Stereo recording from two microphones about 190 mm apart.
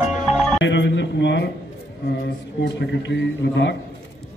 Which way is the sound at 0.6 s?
70° left (ahead or behind).